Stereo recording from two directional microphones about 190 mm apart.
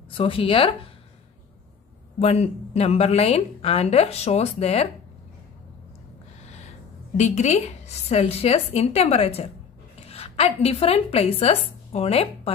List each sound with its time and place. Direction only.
0.1 s speech: 30° left (ahead or behind)
2.1 s a woman's voice: 35° left (ahead or behind)
6.4 s a sound: 35° left (ahead or behind)
7.2 s a woman's voice: 35° left (ahead or behind)